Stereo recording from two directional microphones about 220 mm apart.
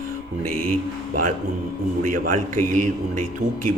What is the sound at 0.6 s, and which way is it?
Speech, 90° right.